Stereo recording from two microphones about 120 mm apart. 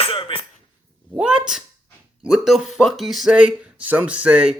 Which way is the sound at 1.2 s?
5° right (ahead or behind).